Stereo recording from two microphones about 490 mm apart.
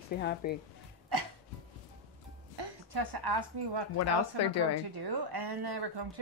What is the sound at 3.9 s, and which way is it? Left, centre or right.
Speech, left.